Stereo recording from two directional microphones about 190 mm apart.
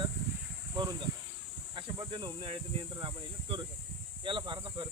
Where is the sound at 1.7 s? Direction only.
25° right (ahead or behind).